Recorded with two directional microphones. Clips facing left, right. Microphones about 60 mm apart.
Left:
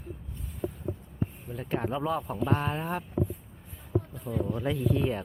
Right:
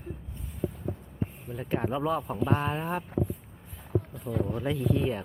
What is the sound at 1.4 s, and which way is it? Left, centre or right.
Speech, centre.